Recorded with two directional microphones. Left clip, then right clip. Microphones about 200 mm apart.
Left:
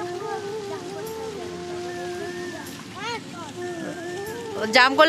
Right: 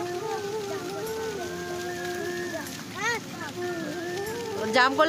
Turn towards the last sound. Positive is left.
turn(degrees=15)  # may be behind; listen again after turning